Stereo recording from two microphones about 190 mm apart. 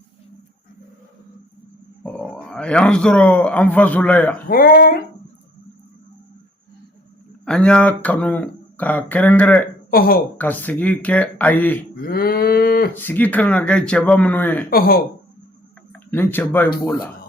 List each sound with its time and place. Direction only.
2.0 s speech: 5° left (ahead or behind)
4.4 s speech: 50° left (ahead or behind)
7.4 s speech: 5° left (ahead or behind)
9.9 s speech: 50° left (ahead or behind)
10.3 s speech: 10° left (ahead or behind)
11.9 s cattle: 50° left (ahead or behind)
12.9 s speech: 10° left (ahead or behind)
14.7 s speech: 50° left (ahead or behind)
15.9 s speech: 10° left (ahead or behind)